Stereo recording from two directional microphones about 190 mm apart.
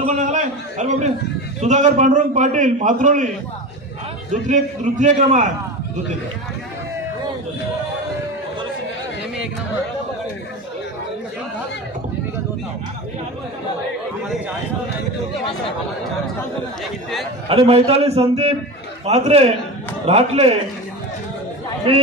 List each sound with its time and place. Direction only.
0.0 s a man's voice: 40° right (ahead or behind)
4.3 s a man's voice: 40° right (ahead or behind)
17.5 s a man's voice: 30° right (ahead or behind)